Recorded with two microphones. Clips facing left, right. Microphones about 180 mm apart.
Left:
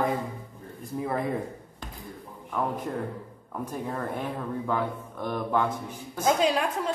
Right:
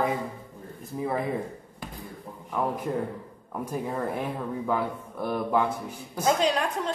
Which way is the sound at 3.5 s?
5° right (ahead or behind).